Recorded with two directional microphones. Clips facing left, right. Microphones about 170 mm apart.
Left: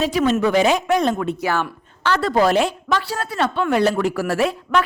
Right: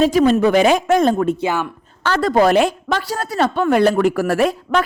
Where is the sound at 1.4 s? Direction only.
20° right (ahead or behind).